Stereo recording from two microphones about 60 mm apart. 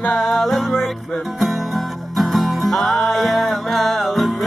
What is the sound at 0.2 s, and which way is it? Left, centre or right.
Music, centre.